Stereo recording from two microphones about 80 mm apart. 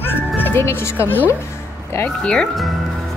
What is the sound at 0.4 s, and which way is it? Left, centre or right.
Speech, left.